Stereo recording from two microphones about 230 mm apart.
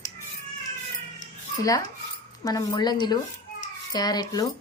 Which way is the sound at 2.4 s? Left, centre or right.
Centre.